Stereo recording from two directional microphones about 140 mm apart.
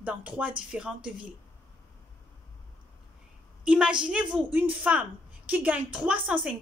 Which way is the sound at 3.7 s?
5° right (ahead or behind).